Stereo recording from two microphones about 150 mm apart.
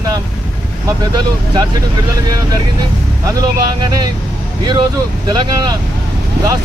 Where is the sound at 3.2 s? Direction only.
25° right (ahead or behind).